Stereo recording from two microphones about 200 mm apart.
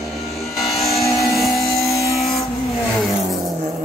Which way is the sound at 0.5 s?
Centre (ahead or behind).